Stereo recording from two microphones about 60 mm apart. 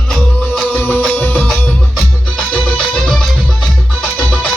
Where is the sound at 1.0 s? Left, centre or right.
Centre.